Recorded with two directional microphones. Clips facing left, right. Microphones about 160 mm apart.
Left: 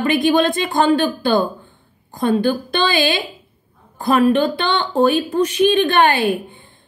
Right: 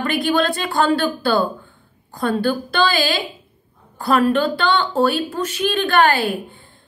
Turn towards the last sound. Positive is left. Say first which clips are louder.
# left 1 dB
turn(degrees=20)  # may be behind; listen again after turning